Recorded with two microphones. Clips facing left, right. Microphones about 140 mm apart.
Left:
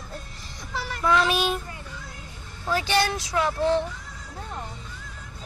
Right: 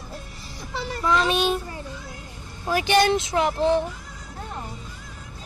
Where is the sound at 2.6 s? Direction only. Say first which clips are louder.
Right 4 dB; 15° right (ahead or behind).